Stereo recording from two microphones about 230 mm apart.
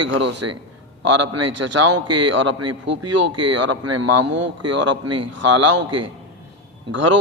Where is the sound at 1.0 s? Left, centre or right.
Right.